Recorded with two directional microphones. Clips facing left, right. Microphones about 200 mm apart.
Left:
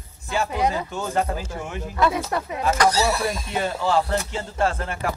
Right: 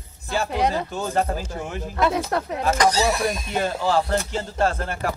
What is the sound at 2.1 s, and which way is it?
Speech, 60° right (ahead or behind).